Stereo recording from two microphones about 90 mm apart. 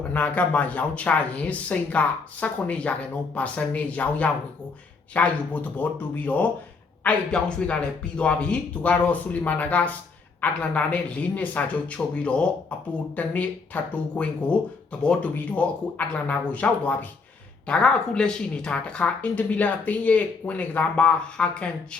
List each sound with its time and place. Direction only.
0.1 s speech: 15° left (ahead or behind)